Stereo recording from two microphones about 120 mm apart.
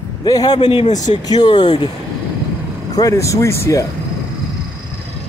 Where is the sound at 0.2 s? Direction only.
35° left (ahead or behind).